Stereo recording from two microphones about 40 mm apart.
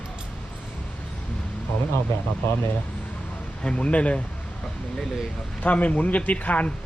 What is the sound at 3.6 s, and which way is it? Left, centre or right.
Speech, left.